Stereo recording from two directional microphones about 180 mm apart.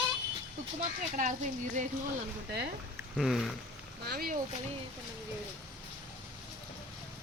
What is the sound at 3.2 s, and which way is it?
Speech, centre (ahead or behind).